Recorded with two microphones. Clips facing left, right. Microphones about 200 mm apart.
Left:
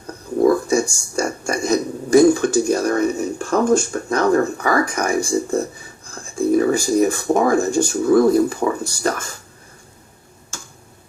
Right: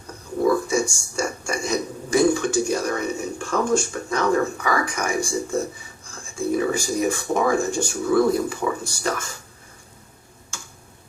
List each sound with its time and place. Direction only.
0.4 s speech: 40° left (ahead or behind)
6.6 s speech: 40° left (ahead or behind)